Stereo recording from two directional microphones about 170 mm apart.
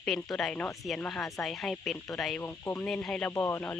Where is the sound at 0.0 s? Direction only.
5° left (ahead or behind).